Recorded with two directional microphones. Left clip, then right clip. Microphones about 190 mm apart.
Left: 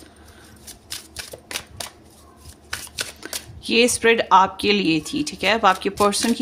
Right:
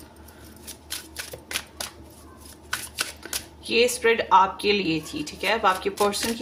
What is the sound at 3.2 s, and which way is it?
Speech, 65° left (ahead or behind).